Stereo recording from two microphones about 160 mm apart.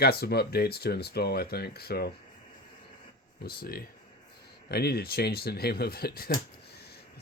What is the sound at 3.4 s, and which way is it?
Speech, 70° left (ahead or behind).